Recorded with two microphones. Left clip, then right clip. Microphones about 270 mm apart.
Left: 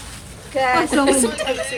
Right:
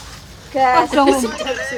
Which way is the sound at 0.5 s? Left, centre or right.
Centre.